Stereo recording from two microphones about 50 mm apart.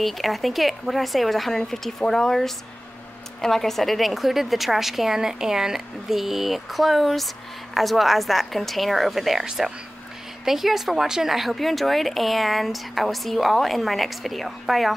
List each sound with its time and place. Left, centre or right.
0.0 s speech: centre